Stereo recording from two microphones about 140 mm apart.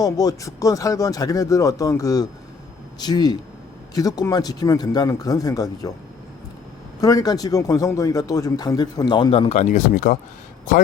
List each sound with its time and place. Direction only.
0.0 s speech: 25° left (ahead or behind)
7.0 s speech: 25° left (ahead or behind)
9.3 s speech: 45° left (ahead or behind); by 10.2 s 65° left (ahead or behind)